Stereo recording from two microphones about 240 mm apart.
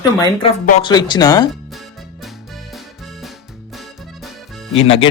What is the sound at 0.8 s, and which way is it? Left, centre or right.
Speech, centre.